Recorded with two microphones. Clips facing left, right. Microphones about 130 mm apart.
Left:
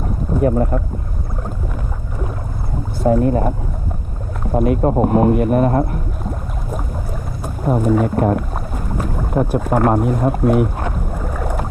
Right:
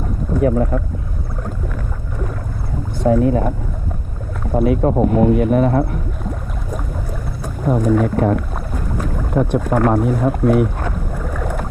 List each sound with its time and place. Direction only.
0.3 s speech: 5° left (ahead or behind)
3.0 s speech: centre (ahead or behind)
4.6 s speech: centre (ahead or behind)
5.0 s speech: 45° left (ahead or behind)
5.4 s speech: centre (ahead or behind)
7.4 s speech: 5° left (ahead or behind)
8.3 s boat: 10° left (ahead or behind)
10.0 s speech: 5° left (ahead or behind)
10.8 s boat: 5° left (ahead or behind)